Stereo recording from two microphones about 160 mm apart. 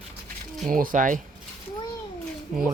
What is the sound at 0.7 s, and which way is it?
Speech, 60° right (ahead or behind).